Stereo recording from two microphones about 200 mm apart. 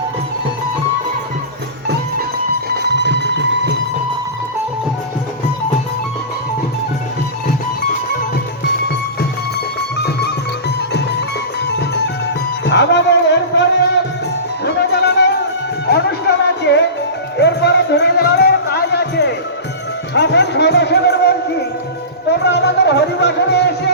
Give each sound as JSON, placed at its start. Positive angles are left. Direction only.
{"t": 2.6, "sound": "music", "side_deg": -55}
{"t": 7.4, "sound": "music", "side_deg": 50}
{"t": 10.0, "sound": "music", "side_deg": 55}
{"t": 11.6, "sound": "music", "side_deg": 55}
{"t": 12.6, "sound": "a sound", "side_deg": 60}
{"t": 14.6, "sound": "music", "side_deg": 55}
{"t": 22.4, "sound": "music", "side_deg": 60}